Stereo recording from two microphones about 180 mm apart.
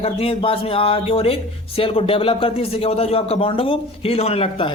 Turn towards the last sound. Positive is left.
turn(degrees=30)  # may be behind; listen again after turning